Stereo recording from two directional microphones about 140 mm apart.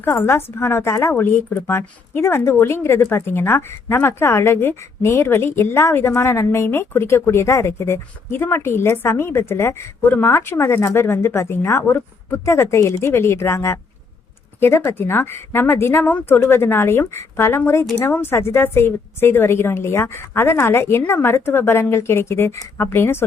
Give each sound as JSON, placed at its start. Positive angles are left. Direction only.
{"t": 0.0, "sound": "a woman's voice", "side_deg": 15}